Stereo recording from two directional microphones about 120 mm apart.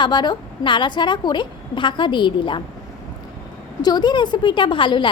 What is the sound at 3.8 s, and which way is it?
A woman's voice, 35° left (ahead or behind).